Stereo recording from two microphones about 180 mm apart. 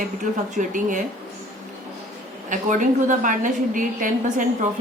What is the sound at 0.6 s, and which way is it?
Speech, 45° right (ahead or behind).